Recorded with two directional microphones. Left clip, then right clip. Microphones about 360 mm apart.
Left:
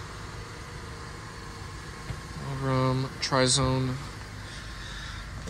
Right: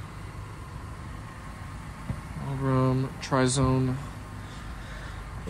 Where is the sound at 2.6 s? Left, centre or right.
Centre.